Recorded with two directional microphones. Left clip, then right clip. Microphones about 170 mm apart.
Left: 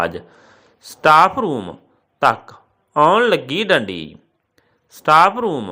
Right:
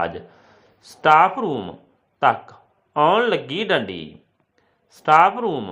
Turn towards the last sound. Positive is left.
turn(degrees=15)  # may be behind; listen again after turning